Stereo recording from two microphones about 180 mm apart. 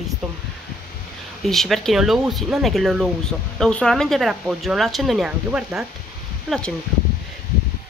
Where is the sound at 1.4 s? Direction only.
Centre (ahead or behind).